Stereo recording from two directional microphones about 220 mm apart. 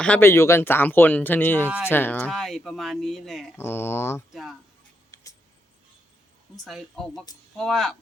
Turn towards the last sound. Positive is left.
turn(degrees=0)  # may be behind; listen again after turning